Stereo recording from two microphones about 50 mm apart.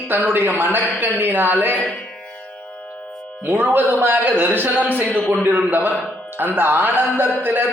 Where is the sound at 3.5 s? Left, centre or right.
Right.